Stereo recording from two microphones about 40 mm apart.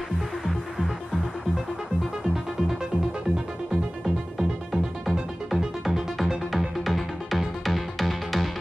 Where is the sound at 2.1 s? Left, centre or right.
Centre.